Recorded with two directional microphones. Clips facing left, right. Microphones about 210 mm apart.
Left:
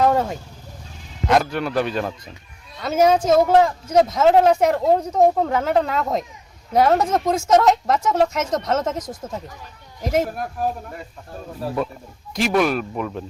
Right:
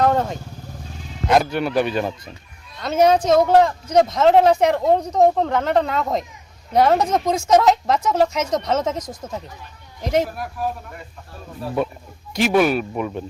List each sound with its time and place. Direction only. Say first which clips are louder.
0.0 s speech: even; 5° left (ahead or behind)
10.3 s speech: left 2 dB; 45° left (ahead or behind)
12.3 s speech: right 2 dB; centre (ahead or behind)